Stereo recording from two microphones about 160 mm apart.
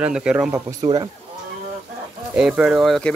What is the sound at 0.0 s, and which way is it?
Speech, 5° right (ahead or behind).